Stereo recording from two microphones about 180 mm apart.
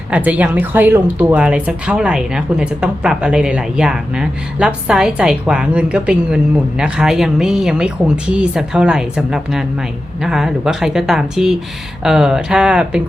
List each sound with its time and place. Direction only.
0.1 s speech: 10° right (ahead or behind)